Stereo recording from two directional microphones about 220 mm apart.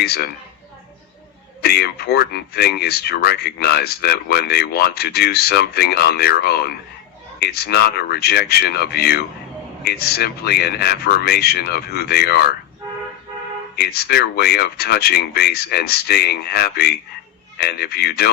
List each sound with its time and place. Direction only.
0.0 s speech: 45° left (ahead or behind)
1.6 s speech: 45° left (ahead or behind)
13.7 s speech: 45° left (ahead or behind)